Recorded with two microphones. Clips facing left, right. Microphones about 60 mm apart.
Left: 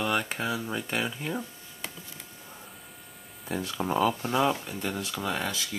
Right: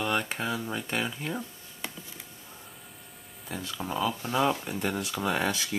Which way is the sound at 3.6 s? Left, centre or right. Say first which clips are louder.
Left 5 dB; left.